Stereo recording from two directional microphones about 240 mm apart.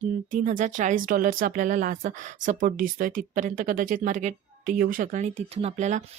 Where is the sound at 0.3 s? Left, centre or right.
Right.